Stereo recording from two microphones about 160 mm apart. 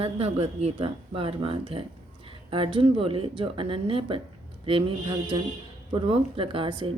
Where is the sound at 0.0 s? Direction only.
40° right (ahead or behind).